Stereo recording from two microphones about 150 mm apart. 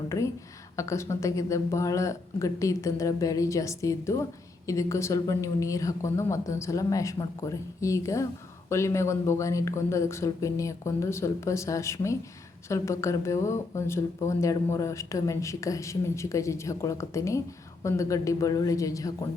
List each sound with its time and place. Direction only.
0.8 s speech: 20° left (ahead or behind)